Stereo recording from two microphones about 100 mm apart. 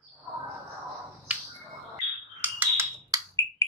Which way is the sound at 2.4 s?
20° right (ahead or behind).